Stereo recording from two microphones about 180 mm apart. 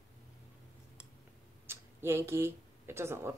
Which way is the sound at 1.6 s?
15° right (ahead or behind).